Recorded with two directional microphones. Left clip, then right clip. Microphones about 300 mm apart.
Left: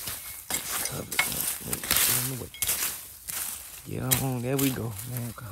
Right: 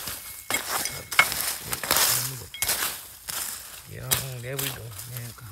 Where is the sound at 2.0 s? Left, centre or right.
Centre.